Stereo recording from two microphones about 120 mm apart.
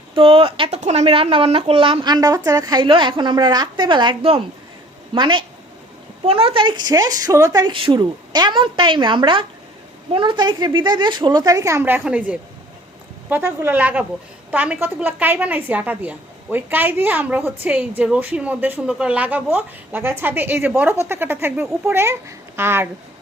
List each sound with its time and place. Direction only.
0.1 s speech: 50° right (ahead or behind)
0.8 s a woman's voice: 70° right (ahead or behind); by 11.8 s 30° right (ahead or behind)
11.8 s a woman's voice: 15° right (ahead or behind)